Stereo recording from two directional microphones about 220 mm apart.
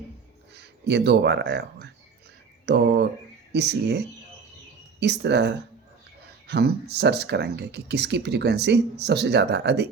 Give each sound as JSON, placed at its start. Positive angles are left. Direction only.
{"t": 0.5, "sound": "speech", "side_deg": -50}